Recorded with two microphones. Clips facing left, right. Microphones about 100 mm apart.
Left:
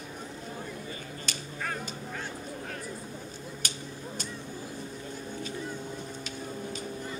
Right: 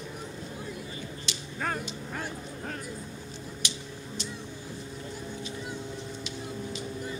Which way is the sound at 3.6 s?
45° left (ahead or behind).